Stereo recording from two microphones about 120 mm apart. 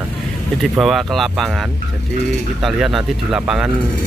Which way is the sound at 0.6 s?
Centre (ahead or behind).